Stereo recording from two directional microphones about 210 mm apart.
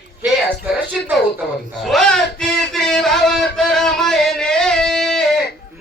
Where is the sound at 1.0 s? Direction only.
Centre (ahead or behind).